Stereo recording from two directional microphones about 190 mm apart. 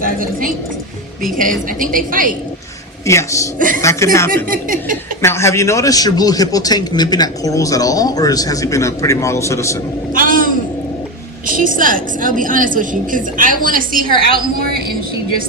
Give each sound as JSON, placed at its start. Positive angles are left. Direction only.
{"t": 0.0, "sound": "a woman's voice", "side_deg": -45}
{"t": 3.1, "sound": "speech", "side_deg": 15}
{"t": 4.4, "sound": "a woman's voice", "side_deg": -45}
{"t": 5.2, "sound": "a man's voice", "side_deg": 15}
{"t": 10.2, "sound": "a sound", "side_deg": -45}
{"t": 11.5, "sound": "a woman's voice", "side_deg": -45}